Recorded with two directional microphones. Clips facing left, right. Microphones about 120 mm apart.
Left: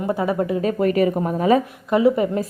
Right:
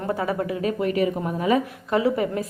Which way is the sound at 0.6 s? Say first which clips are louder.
Left 4 dB; 40° left (ahead or behind).